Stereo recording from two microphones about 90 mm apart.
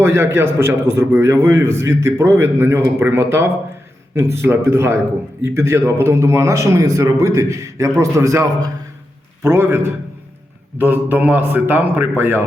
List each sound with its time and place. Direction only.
0.0 s a man's voice: 30° right (ahead or behind)